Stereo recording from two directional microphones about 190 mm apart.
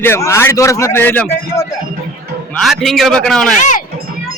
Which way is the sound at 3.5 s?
40° left (ahead or behind).